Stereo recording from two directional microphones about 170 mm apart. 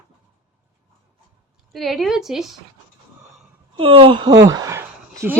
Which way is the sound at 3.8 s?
30° right (ahead or behind).